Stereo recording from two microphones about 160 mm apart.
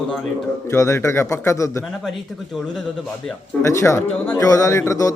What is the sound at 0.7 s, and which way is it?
A man's voice, 15° left (ahead or behind).